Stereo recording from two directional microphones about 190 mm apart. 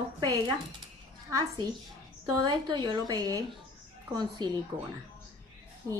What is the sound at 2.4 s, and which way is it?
Speech, 25° right (ahead or behind).